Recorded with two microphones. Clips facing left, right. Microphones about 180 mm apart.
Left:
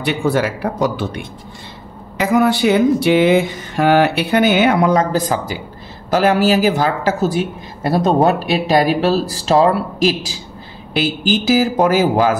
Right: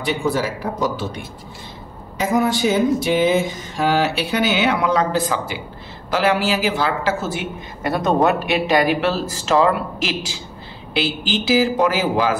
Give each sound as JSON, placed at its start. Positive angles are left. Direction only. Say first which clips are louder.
{"t": 0.0, "sound": "a man's voice", "louder": "left 4 dB", "side_deg": 65}